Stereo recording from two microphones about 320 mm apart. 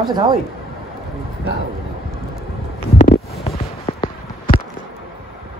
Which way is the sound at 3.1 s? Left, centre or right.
Centre.